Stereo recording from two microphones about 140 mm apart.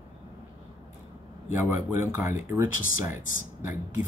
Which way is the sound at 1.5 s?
15° right (ahead or behind).